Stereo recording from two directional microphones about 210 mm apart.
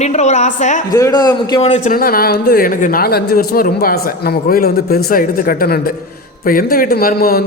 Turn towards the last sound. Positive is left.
turn(degrees=45)  # may be behind; listen again after turning